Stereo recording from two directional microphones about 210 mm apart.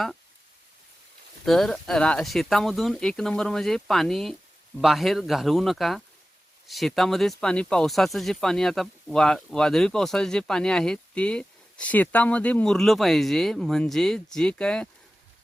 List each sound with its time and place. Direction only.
1.5 s speech: centre (ahead or behind)